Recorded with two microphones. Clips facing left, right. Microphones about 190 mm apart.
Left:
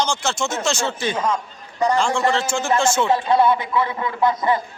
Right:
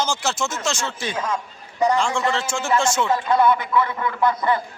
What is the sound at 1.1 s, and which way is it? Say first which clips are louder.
Speech: left 3 dB; 65° left (ahead or behind).